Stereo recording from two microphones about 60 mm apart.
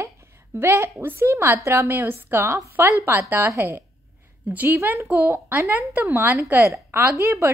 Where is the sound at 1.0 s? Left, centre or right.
Right.